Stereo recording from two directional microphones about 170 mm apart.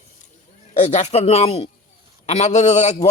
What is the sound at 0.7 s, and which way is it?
A man's voice, 40° left (ahead or behind).